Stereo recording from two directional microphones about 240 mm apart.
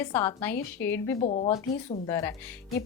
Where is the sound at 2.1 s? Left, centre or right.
Centre.